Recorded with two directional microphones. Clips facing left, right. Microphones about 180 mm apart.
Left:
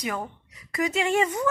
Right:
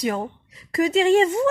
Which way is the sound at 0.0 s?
30° right (ahead or behind).